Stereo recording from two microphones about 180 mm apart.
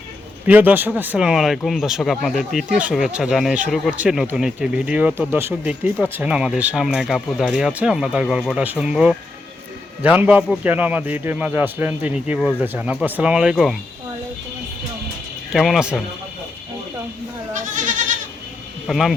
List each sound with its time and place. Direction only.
0.4 s a man's voice: 10° right (ahead or behind)
15.5 s speech: centre (ahead or behind)
17.5 s goat: 45° right (ahead or behind)
18.9 s speech: centre (ahead or behind)